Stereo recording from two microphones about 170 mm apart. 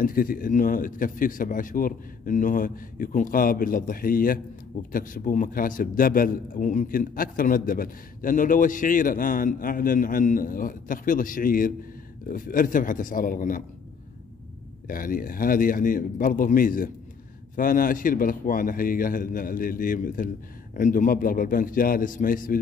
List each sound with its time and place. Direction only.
0.0 s a man's voice: 55° left (ahead or behind)
14.9 s speech: 55° left (ahead or behind)